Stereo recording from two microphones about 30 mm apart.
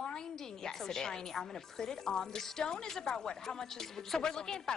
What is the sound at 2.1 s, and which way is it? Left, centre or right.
Speech, left.